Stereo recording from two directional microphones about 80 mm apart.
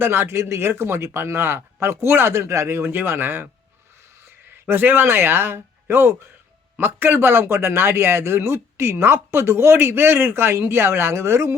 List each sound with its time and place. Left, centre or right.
0.0 s a man's voice: right
4.7 s a man's voice: right